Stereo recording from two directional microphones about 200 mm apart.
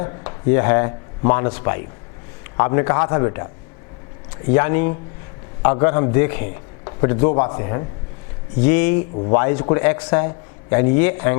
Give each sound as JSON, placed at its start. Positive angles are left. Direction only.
{"t": 0.0, "sound": "a man's voice", "side_deg": 20}
{"t": 8.6, "sound": "a man's voice", "side_deg": 10}